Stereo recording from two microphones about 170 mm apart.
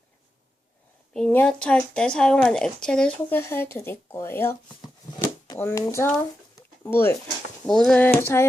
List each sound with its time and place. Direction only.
1.1 s speech: 5° left (ahead or behind)
5.2 s a sound: 15° left (ahead or behind)
7.7 s speech: 5° left (ahead or behind)